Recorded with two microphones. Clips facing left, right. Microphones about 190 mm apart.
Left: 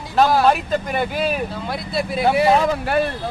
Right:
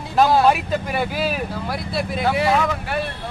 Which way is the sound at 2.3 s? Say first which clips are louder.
Left 4 dB; 15° left (ahead or behind).